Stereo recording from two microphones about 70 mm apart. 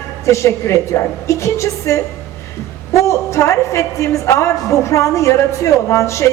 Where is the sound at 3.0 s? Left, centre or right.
Left.